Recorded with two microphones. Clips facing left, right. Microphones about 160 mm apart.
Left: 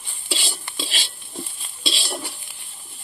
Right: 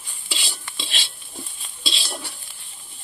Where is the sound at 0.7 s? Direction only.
Centre (ahead or behind).